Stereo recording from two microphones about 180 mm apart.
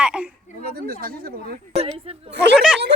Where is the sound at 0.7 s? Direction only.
55° right (ahead or behind).